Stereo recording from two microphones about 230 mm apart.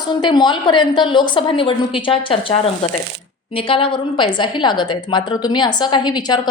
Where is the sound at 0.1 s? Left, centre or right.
Centre.